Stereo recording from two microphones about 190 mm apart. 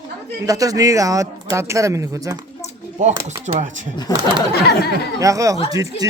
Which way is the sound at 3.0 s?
40° right (ahead or behind).